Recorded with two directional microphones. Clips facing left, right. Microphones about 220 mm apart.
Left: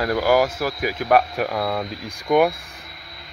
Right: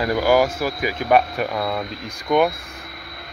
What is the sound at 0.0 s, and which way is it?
Speech, centre (ahead or behind).